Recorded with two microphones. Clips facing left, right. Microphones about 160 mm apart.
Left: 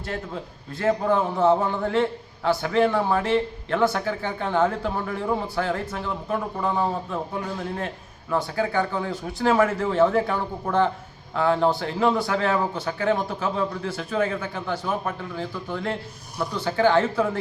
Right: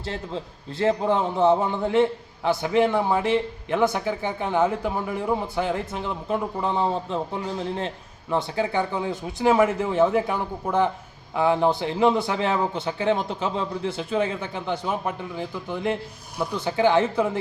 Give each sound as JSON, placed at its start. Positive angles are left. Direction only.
{"t": 0.0, "sound": "a man's voice", "side_deg": -25}